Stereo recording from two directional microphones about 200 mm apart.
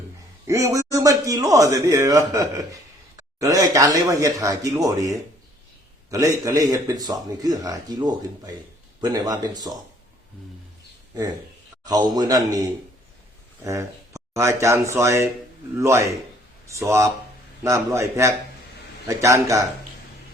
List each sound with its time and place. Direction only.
0.4 s a man's voice: 15° right (ahead or behind)
11.9 s a man's voice: 20° right (ahead or behind)
13.7 s a man's voice: 15° right (ahead or behind)